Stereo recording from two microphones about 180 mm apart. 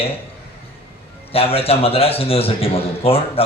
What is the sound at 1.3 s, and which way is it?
A man's voice, 35° left (ahead or behind).